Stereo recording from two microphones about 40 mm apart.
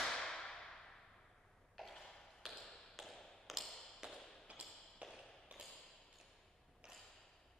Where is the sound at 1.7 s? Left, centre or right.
Centre.